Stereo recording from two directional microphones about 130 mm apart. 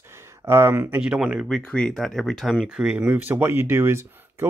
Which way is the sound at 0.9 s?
10° right (ahead or behind).